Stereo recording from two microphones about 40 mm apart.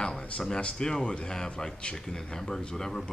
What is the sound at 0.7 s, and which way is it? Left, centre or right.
Speech, centre.